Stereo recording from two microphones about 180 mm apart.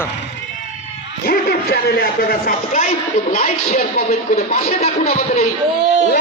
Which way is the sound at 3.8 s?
55° left (ahead or behind).